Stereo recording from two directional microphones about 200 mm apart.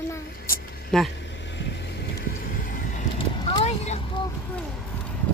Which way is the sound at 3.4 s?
30° left (ahead or behind).